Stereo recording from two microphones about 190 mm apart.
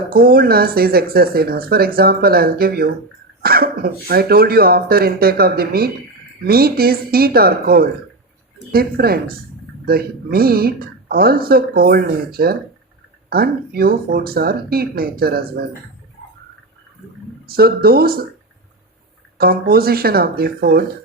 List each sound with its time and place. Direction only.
0.1 s speech: 50° right (ahead or behind)
17.4 s speech: 50° right (ahead or behind)
19.4 s speech: 50° right (ahead or behind)